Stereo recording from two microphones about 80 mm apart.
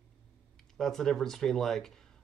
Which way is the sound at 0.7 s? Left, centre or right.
Centre.